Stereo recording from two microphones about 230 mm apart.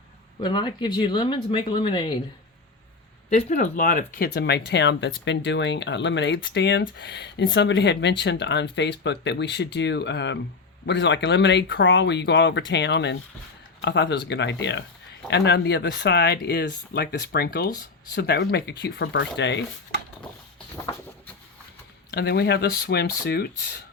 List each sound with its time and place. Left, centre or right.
0.4 s speech: centre
3.2 s speech: left
20.9 s speech: centre
22.1 s speech: left